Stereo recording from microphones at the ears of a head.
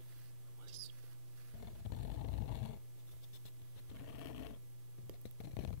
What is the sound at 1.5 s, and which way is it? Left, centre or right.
Snoring, left.